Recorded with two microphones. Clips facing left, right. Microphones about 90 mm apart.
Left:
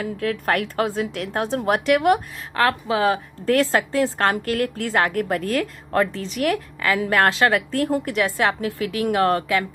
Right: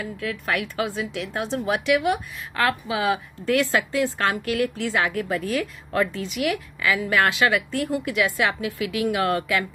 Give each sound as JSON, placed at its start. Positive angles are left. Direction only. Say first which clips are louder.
{"t": 0.0, "sound": "a woman's voice", "louder": "left 5 dB", "side_deg": 50}